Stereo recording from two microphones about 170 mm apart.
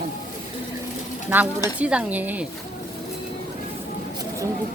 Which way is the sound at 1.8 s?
5° right (ahead or behind).